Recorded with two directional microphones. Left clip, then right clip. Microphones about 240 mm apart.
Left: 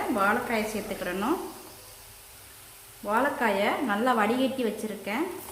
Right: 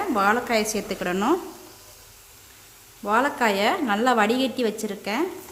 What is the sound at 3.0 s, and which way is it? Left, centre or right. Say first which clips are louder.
A woman's voice: right 4 dB; right.